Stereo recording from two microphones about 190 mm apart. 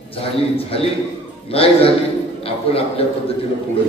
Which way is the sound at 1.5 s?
30° left (ahead or behind).